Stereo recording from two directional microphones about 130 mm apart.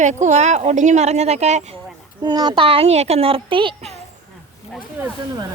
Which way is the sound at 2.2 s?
35° right (ahead or behind).